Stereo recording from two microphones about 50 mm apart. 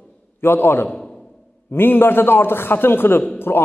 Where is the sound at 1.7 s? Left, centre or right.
Left.